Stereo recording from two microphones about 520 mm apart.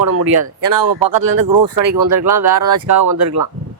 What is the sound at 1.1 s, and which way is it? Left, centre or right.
Speech, right.